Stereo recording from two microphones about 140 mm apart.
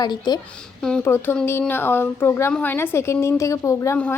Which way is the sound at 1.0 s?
15° left (ahead or behind).